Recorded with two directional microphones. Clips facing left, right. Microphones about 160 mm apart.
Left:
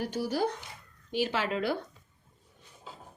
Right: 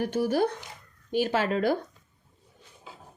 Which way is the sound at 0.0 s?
55° right (ahead or behind).